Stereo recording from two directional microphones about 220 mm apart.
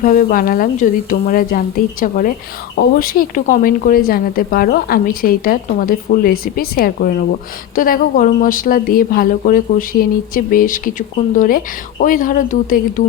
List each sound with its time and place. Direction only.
0.0 s a woman's voice: 40° left (ahead or behind)